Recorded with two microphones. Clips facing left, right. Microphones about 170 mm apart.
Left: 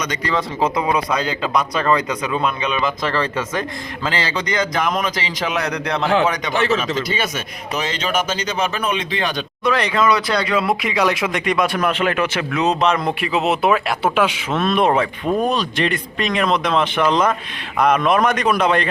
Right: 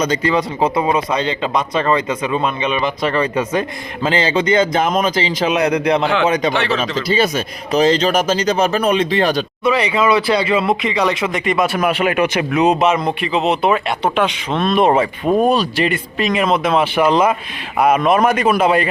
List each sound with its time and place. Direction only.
0.0 s a man's voice: 25° right (ahead or behind)
1.2 s speech: 5° left (ahead or behind)
3.2 s a man's voice: 15° right (ahead or behind)
6.2 s speech: 25° right (ahead or behind)
9.6 s speech: 5° right (ahead or behind)